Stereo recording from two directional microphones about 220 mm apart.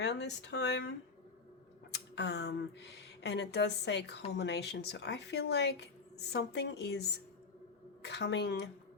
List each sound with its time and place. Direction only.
0.0 s speech: 50° left (ahead or behind)